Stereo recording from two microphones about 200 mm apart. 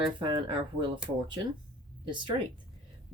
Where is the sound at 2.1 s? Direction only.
25° right (ahead or behind).